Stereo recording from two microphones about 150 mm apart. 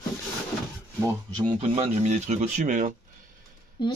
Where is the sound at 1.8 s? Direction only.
50° right (ahead or behind).